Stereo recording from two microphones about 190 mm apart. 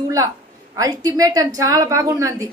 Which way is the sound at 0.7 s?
20° right (ahead or behind).